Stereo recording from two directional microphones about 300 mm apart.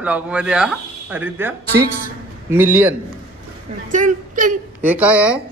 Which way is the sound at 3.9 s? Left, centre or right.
Right.